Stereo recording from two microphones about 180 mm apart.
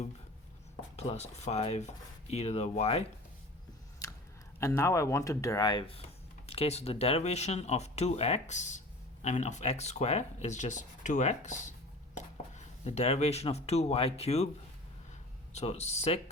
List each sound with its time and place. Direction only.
0.9 s speech: 35° left (ahead or behind)
4.6 s speech: 15° left (ahead or behind); by 14.5 s 35° left (ahead or behind)
15.5 s speech: 35° left (ahead or behind)